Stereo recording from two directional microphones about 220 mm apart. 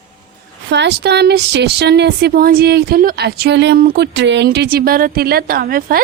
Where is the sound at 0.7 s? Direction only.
50° right (ahead or behind).